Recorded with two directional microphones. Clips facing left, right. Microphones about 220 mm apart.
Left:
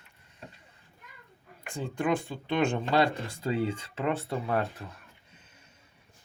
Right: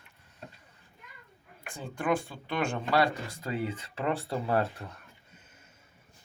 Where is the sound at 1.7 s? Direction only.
15° left (ahead or behind).